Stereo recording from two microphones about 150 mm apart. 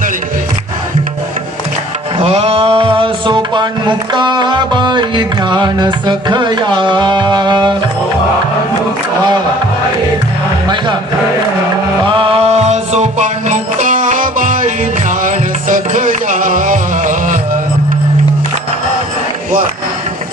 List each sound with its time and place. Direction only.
2.1 s music: 40° right (ahead or behind)
12.0 s music: 35° right (ahead or behind); by 17.6 s 60° right (ahead or behind)